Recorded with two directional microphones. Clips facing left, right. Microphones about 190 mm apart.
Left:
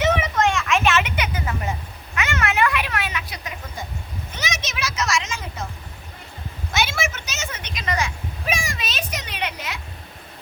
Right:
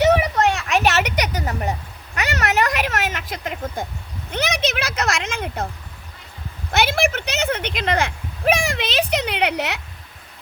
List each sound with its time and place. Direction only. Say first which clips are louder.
0.0 s children playing: right 4 dB; 35° right (ahead or behind)
2.1 s a sound: right 2 dB; 40° right (ahead or behind)
4.3 s speech: right 10 dB; 60° right (ahead or behind)
6.7 s speech: right 6 dB; 60° right (ahead or behind)